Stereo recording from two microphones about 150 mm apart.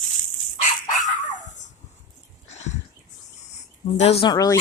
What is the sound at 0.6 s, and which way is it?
Dog, 55° left (ahead or behind).